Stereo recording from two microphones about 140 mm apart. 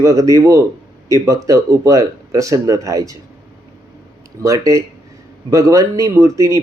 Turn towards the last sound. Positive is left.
turn(degrees=-20)  # may be behind; listen again after turning